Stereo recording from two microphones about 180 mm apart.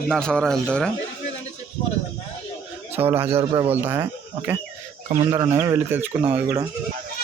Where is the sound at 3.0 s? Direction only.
10° right (ahead or behind).